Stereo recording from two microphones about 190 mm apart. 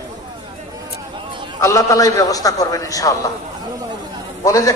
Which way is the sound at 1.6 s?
15° left (ahead or behind).